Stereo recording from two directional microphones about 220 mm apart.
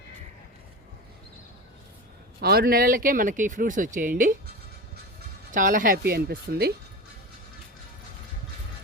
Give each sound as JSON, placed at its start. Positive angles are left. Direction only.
{"t": 2.4, "sound": "speech", "side_deg": -45}
{"t": 5.5, "sound": "speech", "side_deg": -40}